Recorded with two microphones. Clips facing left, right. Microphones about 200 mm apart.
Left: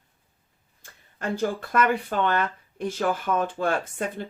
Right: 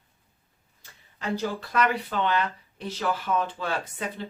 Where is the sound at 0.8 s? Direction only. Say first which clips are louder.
Left 3 dB; 50° left (ahead or behind).